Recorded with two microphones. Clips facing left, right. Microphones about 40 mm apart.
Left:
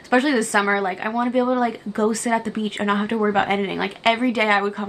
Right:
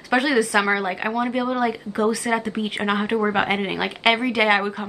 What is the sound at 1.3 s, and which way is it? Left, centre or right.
Speech, right.